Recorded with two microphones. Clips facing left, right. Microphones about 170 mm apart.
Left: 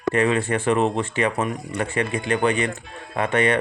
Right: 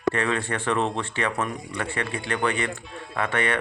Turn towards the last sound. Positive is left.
turn(degrees=20)  # may be behind; listen again after turning